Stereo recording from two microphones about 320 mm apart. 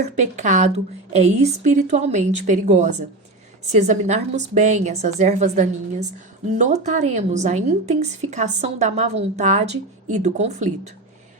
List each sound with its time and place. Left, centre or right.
0.2 s speech: right